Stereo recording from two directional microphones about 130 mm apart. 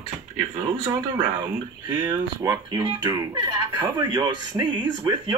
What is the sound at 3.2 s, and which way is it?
Speech, 30° right (ahead or behind).